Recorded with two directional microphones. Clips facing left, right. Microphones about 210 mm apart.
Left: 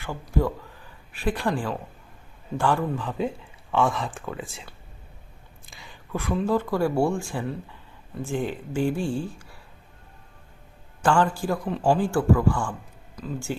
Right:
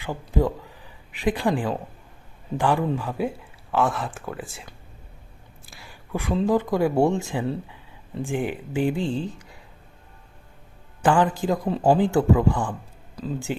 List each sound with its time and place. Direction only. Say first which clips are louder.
0.0 s speech: right 2 dB; 15° right (ahead or behind)
5.6 s whispering: even; 5° right (ahead or behind)
6.4 s speech: right 3 dB; 15° right (ahead or behind)
11.0 s speech: right 2 dB; 15° right (ahead or behind)